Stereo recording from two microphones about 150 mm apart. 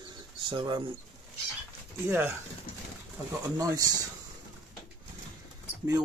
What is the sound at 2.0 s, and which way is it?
Speech, 15° right (ahead or behind).